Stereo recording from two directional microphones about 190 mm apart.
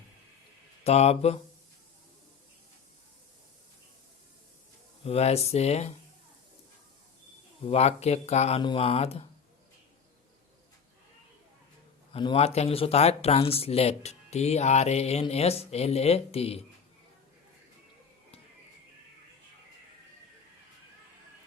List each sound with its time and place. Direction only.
0.9 s speech: 35° left (ahead or behind)
5.0 s speech: 35° left (ahead or behind)
7.7 s speech: 35° left (ahead or behind)
12.1 s speech: 30° left (ahead or behind)